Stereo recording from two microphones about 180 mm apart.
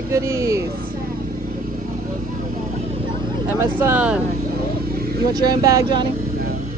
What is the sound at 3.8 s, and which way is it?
Speech, 10° right (ahead or behind).